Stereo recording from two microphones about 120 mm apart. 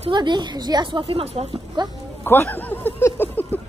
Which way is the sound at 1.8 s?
40° right (ahead or behind).